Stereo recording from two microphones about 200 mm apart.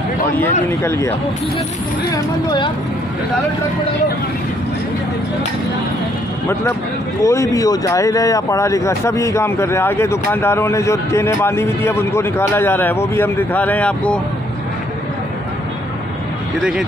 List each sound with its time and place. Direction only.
0.4 s speech: 10° left (ahead or behind)
7.2 s speech: 15° left (ahead or behind)